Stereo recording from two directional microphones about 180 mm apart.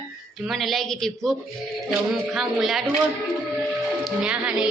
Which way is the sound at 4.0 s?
5° right (ahead or behind).